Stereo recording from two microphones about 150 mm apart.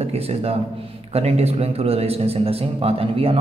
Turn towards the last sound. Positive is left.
turn(degrees=-40)  # may be behind; listen again after turning